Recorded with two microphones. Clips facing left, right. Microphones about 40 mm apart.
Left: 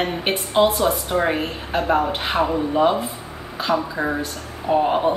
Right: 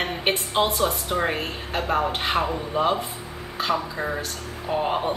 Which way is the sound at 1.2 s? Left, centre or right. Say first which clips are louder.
Left 4 dB; centre.